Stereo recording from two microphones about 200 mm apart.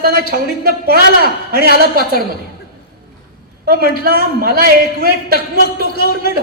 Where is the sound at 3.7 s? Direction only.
50° right (ahead or behind).